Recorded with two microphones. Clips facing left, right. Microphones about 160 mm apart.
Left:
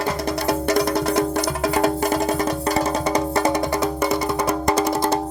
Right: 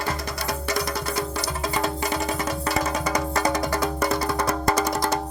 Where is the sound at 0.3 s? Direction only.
55° left (ahead or behind); by 4.5 s 15° left (ahead or behind).